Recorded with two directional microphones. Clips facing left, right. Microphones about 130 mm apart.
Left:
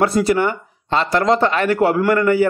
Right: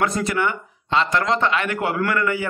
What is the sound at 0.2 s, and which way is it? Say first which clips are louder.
Speech: left 6 dB; 35° left (ahead or behind).